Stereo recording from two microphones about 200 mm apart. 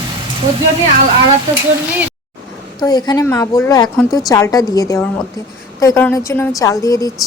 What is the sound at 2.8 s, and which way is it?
A woman's voice, 20° left (ahead or behind).